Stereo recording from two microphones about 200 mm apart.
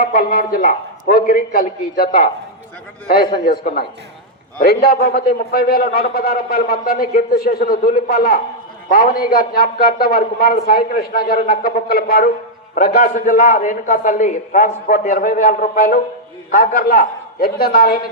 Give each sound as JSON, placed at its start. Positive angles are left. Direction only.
{"t": 0.0, "sound": "a man's voice", "side_deg": 50}